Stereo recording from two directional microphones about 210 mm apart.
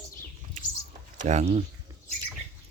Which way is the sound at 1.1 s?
35° right (ahead or behind).